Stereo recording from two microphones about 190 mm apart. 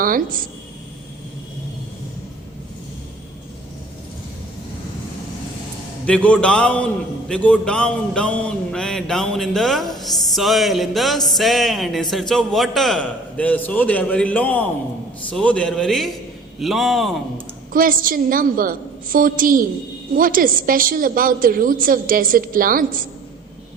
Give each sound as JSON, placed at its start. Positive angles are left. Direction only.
{"t": 0.0, "sound": "a woman's voice", "side_deg": -50}
{"t": 6.1, "sound": "a man's voice", "side_deg": 5}
{"t": 17.7, "sound": "a woman's voice", "side_deg": -45}